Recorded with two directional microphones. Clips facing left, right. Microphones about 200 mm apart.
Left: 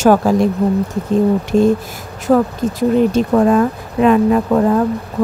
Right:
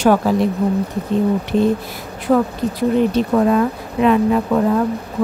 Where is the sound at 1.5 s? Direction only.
45° left (ahead or behind).